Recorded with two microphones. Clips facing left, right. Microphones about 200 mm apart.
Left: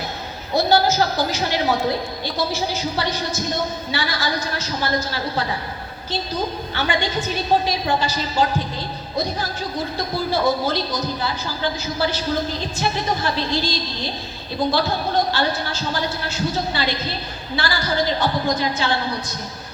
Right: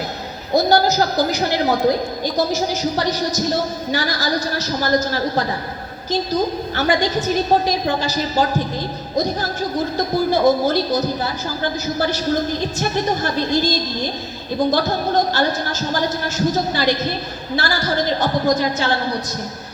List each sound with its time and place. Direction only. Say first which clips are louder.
0.5 s a woman's voice: right 2 dB; 40° right (ahead or behind)